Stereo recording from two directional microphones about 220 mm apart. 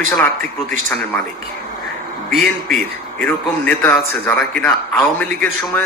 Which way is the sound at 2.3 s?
Centre (ahead or behind).